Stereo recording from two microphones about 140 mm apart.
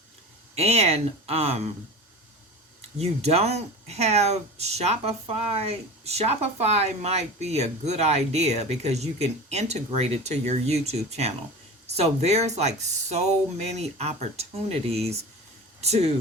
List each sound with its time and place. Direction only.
0.5 s speech: 45° right (ahead or behind)
3.0 s speech: 50° right (ahead or behind)